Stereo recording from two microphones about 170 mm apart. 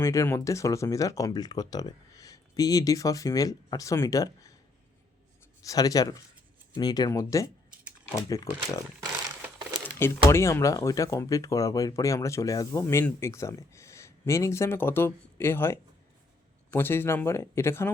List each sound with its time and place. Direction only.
0.0 s speech: 15° left (ahead or behind)
5.6 s speech: 20° left (ahead or behind)
10.2 s speech: 15° left (ahead or behind)